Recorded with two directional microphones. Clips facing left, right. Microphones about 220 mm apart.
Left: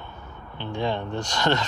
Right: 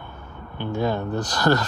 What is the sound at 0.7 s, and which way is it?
Speech, 40° right (ahead or behind).